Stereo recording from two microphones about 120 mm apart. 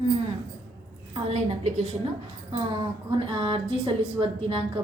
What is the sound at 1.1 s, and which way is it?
Speech, 60° right (ahead or behind).